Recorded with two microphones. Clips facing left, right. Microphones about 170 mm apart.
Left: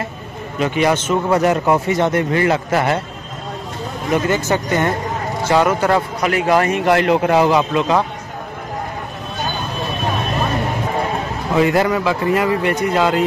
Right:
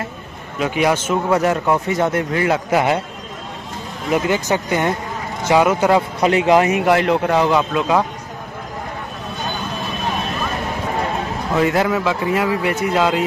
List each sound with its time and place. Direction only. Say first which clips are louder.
0.6 s speech: left 1 dB; 5° right (ahead or behind)
2.7 s speech: right 1 dB; 15° right (ahead or behind)
4.1 s speech: even; 10° right (ahead or behind)
6.8 s speech: left 1 dB; centre (ahead or behind)
11.5 s speech: left 2 dB; centre (ahead or behind)